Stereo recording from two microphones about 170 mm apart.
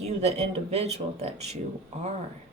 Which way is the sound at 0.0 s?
40° right (ahead or behind).